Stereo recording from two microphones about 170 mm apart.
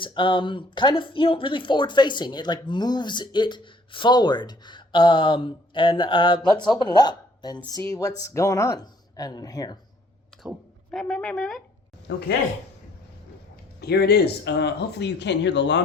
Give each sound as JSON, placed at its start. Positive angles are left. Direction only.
{"t": 0.0, "sound": "speech", "side_deg": 30}
{"t": 10.3, "sound": "a sound", "side_deg": 5}
{"t": 10.9, "sound": "speech", "side_deg": 5}
{"t": 12.1, "sound": "speech", "side_deg": 90}
{"t": 13.8, "sound": "speech", "side_deg": 70}